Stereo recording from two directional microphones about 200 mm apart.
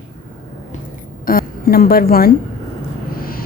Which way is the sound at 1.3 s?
45° left (ahead or behind).